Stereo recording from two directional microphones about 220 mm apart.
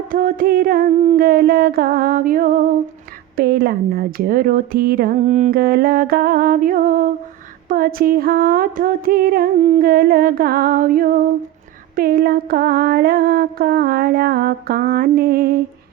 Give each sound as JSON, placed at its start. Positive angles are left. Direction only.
{"t": 0.1, "sound": "speech", "side_deg": -40}